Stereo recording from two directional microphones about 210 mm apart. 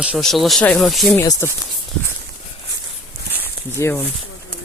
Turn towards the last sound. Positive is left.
turn(degrees=15)  # may be behind; listen again after turning